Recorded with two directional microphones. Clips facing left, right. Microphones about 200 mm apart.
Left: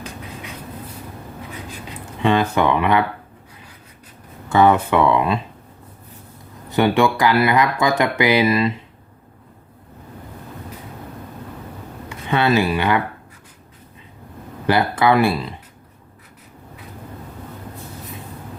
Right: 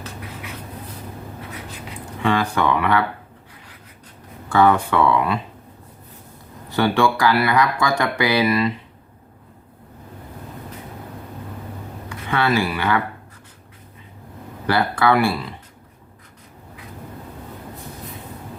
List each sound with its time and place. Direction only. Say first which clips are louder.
2.2 s speech: left 3 dB; 20° left (ahead or behind)
4.4 s speech: left 2 dB; 20° left (ahead or behind)
6.7 s speech: left 2 dB; 20° left (ahead or behind)
12.0 s speech: left 2 dB; 20° left (ahead or behind)
14.7 s speech: left 2 dB; 20° left (ahead or behind)